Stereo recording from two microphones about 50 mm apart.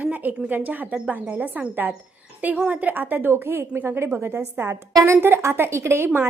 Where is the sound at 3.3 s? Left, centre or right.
Right.